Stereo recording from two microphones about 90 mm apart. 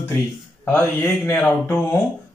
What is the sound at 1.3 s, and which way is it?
Speech, 20° left (ahead or behind).